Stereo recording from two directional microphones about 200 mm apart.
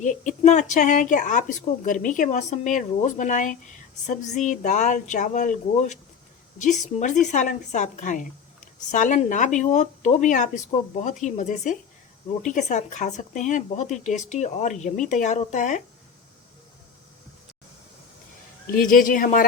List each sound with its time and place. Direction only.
0.0 s a woman's voice: 40° left (ahead or behind)
18.7 s speech: 40° left (ahead or behind)